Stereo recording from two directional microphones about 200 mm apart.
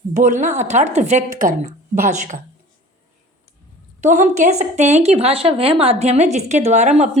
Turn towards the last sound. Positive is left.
turn(degrees=-35)  # may be behind; listen again after turning